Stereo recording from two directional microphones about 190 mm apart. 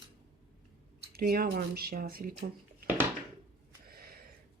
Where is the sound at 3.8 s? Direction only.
50° right (ahead or behind).